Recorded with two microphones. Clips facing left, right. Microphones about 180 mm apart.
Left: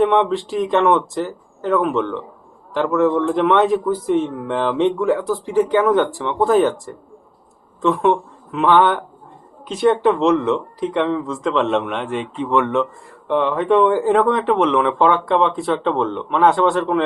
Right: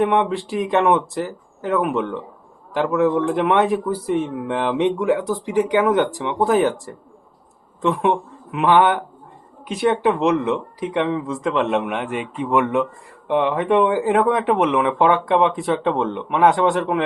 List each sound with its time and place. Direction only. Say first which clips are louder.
0.3 s speech: left 2 dB; 10° right (ahead or behind)
7.8 s speech: left 3 dB; 15° right (ahead or behind)